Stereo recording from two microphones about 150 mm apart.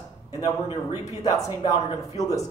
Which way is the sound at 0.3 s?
25° left (ahead or behind).